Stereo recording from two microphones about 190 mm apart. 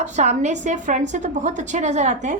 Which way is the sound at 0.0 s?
40° right (ahead or behind).